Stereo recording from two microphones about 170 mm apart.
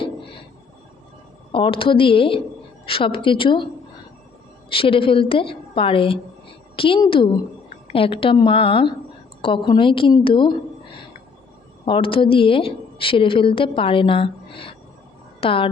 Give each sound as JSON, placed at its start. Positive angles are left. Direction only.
{"t": 0.0, "sound": "a sound", "side_deg": 30}
{"t": 1.5, "sound": "a woman's voice", "side_deg": 30}
{"t": 4.7, "sound": "a woman's voice", "side_deg": 30}